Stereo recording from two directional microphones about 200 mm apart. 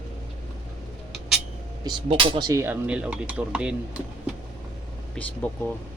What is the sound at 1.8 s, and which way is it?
Speech, 25° right (ahead or behind).